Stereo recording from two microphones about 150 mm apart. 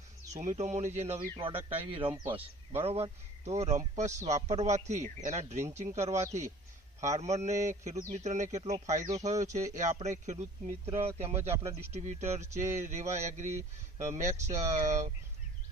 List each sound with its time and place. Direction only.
0.5 s speech: 50° right (ahead or behind); by 2.3 s 30° right (ahead or behind)
2.8 s speech: 40° right (ahead or behind)
11.1 s speech: 15° right (ahead or behind)
11.9 s speech: 50° right (ahead or behind)